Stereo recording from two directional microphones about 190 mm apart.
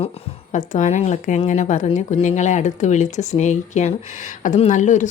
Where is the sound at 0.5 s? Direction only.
40° left (ahead or behind).